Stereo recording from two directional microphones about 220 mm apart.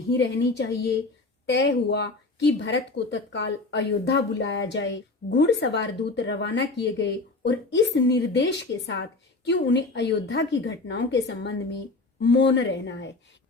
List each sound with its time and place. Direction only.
0.2 s speech: 50° left (ahead or behind)